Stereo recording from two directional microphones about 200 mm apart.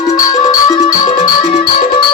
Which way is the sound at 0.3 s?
20° left (ahead or behind).